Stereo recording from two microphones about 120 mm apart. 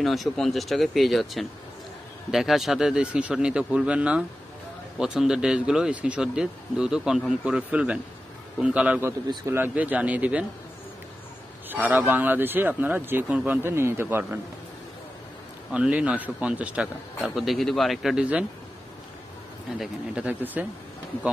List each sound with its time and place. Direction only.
0.0 s speech: centre (ahead or behind)
11.7 s a man's voice: 15° right (ahead or behind)
15.7 s speech: 10° right (ahead or behind)
19.8 s speech: 10° right (ahead or behind)